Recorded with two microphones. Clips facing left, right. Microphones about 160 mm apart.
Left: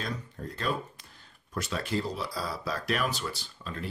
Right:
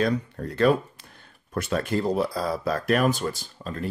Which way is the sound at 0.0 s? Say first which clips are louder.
Right 12 dB; 70° right (ahead or behind).